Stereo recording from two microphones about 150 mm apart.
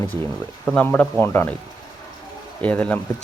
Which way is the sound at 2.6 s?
10° left (ahead or behind).